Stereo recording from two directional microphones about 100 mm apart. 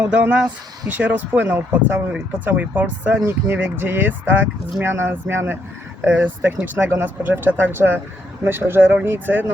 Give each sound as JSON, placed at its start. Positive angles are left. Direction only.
{"t": 0.0, "sound": "speech", "side_deg": -15}